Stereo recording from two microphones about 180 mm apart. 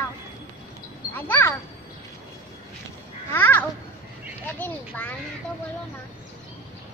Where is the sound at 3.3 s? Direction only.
10° left (ahead or behind).